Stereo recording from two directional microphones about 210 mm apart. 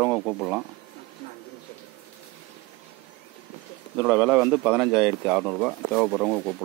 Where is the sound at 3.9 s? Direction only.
5° right (ahead or behind).